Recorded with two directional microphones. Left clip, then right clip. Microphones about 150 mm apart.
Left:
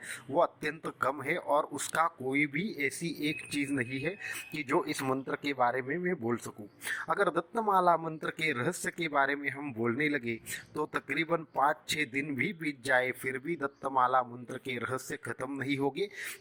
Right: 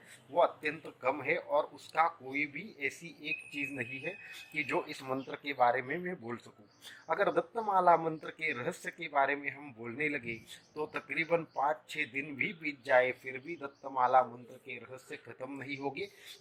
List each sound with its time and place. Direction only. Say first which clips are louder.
0.3 s speech: even; 30° left (ahead or behind)
1.5 s speech: left 3 dB; 45° left (ahead or behind)